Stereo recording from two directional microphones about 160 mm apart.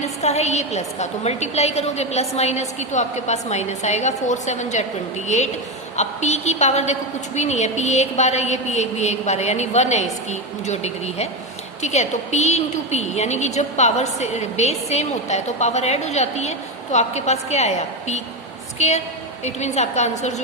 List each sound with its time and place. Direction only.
0.0 s a woman's voice: 45° left (ahead or behind)
6.0 s a woman's voice: 45° left (ahead or behind)